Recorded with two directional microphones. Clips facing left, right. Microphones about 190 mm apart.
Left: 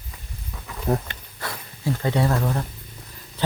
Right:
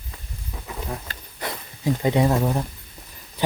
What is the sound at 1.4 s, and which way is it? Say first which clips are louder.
Speech: right 2 dB; 20° right (ahead or behind).